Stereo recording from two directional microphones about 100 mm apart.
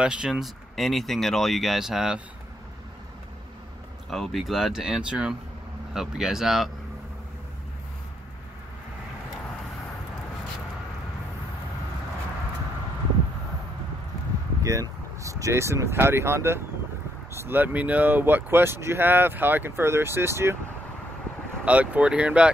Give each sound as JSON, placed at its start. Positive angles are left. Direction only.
{"t": 0.0, "sound": "speech", "side_deg": -10}
{"t": 4.1, "sound": "speech", "side_deg": 0}
{"t": 14.6, "sound": "speech", "side_deg": -35}
{"t": 21.6, "sound": "speech", "side_deg": -15}